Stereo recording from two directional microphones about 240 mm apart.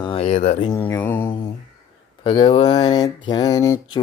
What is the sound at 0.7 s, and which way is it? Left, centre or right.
Speech, centre.